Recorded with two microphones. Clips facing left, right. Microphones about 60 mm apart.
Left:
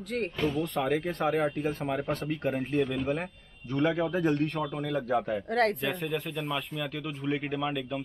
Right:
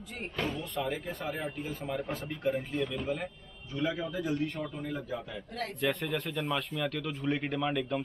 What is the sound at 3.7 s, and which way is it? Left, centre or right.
A man's voice, left.